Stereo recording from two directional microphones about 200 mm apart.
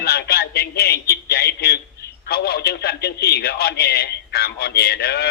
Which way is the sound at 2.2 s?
50° left (ahead or behind).